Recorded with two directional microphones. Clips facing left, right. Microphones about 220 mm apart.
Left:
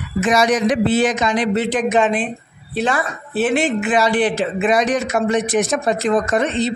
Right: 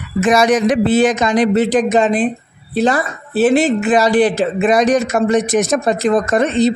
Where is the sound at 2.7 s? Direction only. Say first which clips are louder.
Right 5 dB; 40° right (ahead or behind).